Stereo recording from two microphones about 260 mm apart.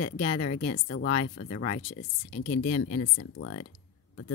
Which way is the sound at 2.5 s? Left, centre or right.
Left.